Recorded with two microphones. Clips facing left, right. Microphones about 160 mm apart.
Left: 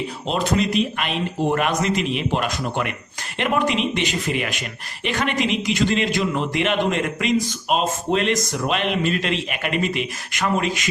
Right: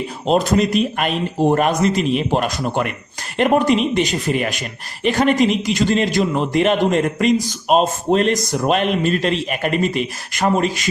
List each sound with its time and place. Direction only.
0.3 s a man's voice: 45° right (ahead or behind)